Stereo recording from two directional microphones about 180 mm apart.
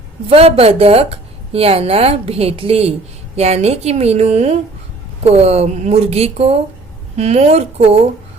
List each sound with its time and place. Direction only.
0.3 s a woman's voice: 35° right (ahead or behind)